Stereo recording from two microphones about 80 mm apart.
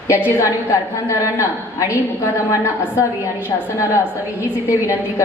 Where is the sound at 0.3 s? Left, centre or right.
Left.